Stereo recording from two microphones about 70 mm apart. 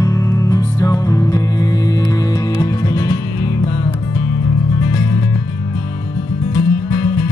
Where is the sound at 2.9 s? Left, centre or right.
Left.